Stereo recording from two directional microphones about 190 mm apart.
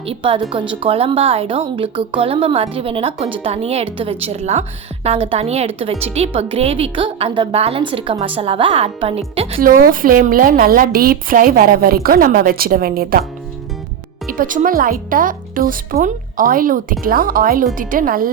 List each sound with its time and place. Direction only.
0.0 s speech: 30° right (ahead or behind)
9.6 s a woman's voice: 50° right (ahead or behind)
14.3 s a woman's voice: 45° right (ahead or behind)